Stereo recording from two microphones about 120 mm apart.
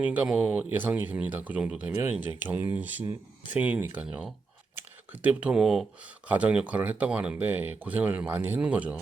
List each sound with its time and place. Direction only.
0.0 s speech: 15° right (ahead or behind)
1.9 s speech: 20° right (ahead or behind)